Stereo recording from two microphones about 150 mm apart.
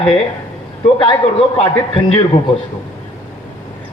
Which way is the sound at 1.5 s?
35° left (ahead or behind).